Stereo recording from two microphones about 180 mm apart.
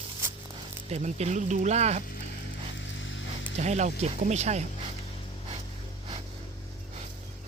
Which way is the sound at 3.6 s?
40° right (ahead or behind).